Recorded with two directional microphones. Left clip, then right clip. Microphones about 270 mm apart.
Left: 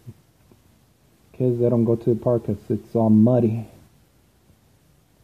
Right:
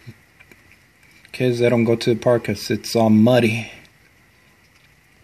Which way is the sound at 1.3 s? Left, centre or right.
Right.